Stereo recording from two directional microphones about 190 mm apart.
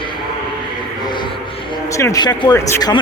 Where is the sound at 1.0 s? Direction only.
25° left (ahead or behind).